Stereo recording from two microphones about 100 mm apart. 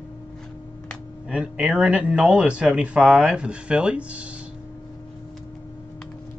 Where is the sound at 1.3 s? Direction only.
10° right (ahead or behind).